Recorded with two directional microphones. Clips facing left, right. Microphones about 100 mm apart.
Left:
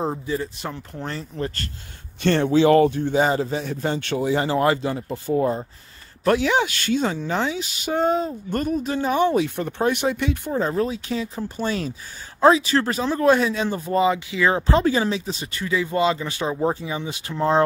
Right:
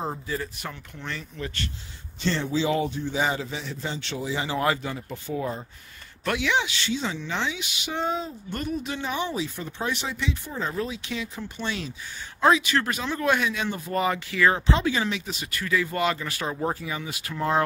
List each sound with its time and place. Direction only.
0.3 s speech: 25° left (ahead or behind)
2.2 s speech: 60° left (ahead or behind)
3.3 s a woman's voice: 40° left (ahead or behind)
4.6 s a woman's voice: 35° left (ahead or behind); by 10.5 s 55° left (ahead or behind)
10.5 s speech: 35° left (ahead or behind)
14.0 s speech: 20° left (ahead or behind)
14.7 s speech: 40° left (ahead or behind)